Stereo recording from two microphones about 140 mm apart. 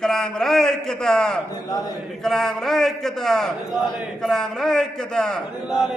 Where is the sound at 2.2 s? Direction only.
Centre (ahead or behind).